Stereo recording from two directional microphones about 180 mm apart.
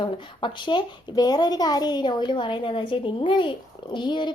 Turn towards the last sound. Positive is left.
turn(degrees=25)  # may be behind; listen again after turning